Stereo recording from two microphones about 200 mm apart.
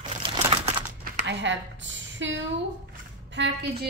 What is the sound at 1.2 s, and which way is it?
A woman's voice, 60° right (ahead or behind).